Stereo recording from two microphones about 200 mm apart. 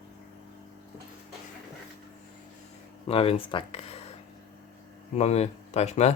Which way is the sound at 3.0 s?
30° left (ahead or behind).